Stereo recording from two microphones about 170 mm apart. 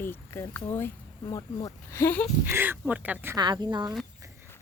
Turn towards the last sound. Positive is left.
turn(degrees=-25)  # may be behind; listen again after turning